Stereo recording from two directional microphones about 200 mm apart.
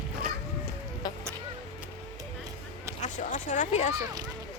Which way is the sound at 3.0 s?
40° left (ahead or behind).